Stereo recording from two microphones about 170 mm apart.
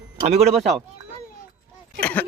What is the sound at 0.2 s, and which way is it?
Speech, 40° right (ahead or behind).